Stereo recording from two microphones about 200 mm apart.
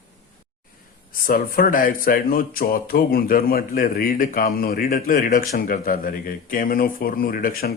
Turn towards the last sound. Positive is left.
turn(degrees=45)  # may be behind; listen again after turning